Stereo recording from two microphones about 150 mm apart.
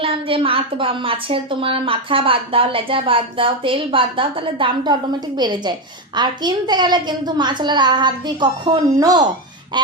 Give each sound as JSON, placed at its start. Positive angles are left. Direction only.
{"t": 0.0, "sound": "a woman's voice", "side_deg": -35}